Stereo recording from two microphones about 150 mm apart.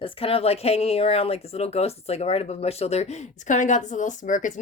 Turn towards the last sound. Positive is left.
turn(degrees=55)  # may be behind; listen again after turning